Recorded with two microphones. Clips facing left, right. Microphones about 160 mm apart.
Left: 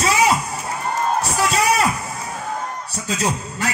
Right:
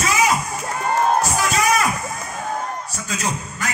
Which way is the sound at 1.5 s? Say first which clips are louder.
Left 2 dB; 30° left (ahead or behind).